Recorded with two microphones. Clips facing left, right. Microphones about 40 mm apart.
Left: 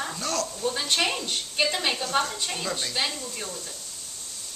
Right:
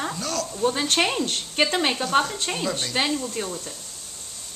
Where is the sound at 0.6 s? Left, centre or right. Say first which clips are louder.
Right 5 dB; right.